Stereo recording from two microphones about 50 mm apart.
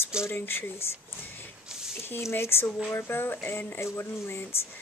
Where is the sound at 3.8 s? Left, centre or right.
Left.